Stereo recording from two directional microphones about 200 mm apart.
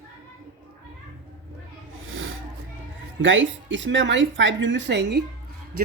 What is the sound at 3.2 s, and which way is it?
Speech, 70° right (ahead or behind).